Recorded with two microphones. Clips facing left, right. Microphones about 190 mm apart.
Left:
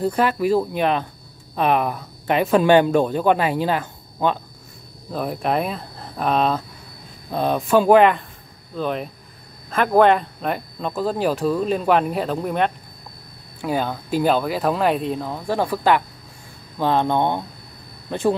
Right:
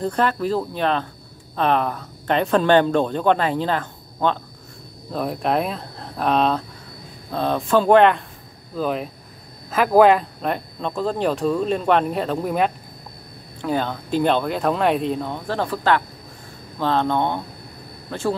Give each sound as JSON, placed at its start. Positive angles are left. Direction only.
{"t": 0.0, "sound": "speech", "side_deg": 10}
{"t": 7.3, "sound": "speech", "side_deg": 15}
{"t": 13.6, "sound": "speech", "side_deg": 10}
{"t": 15.4, "sound": "speech", "side_deg": 10}